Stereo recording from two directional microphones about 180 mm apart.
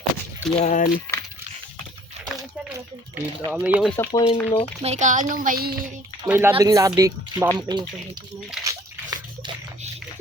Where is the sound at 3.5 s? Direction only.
5° right (ahead or behind).